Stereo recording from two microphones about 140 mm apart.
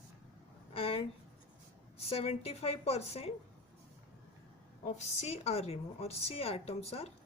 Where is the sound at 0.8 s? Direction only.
40° left (ahead or behind).